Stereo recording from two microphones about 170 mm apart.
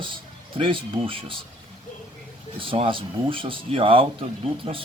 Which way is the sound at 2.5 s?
30° right (ahead or behind).